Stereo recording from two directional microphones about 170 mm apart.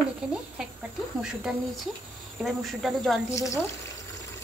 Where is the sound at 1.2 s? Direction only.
5° right (ahead or behind).